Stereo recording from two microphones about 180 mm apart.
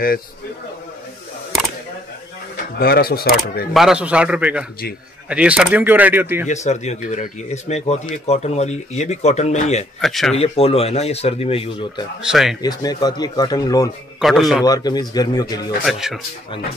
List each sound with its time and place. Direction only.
2.5 s speech: 55° left (ahead or behind)
3.7 s speech: 5° right (ahead or behind)
6.4 s speech: 40° left (ahead or behind)
9.9 s speech: centre (ahead or behind)
10.3 s speech: 35° left (ahead or behind)
12.2 s speech: 5° right (ahead or behind)
12.6 s speech: 20° left (ahead or behind)
14.2 s speech: centre (ahead or behind)
14.6 s speech: 20° left (ahead or behind)
15.8 s speech: centre (ahead or behind)